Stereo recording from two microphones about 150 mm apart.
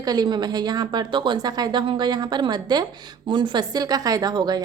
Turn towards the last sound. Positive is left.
turn(degrees=-30)  # may be behind; listen again after turning